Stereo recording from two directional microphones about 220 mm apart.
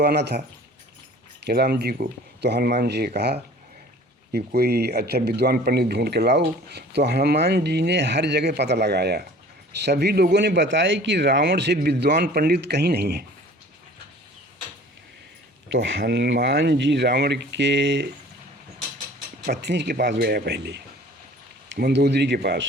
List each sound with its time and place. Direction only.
0.0 s speech: 50° right (ahead or behind)
15.7 s speech: 55° right (ahead or behind)
19.5 s speech: 50° right (ahead or behind)